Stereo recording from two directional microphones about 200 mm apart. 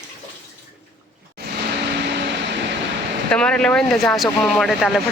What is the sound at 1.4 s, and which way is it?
Vehicle, 55° right (ahead or behind).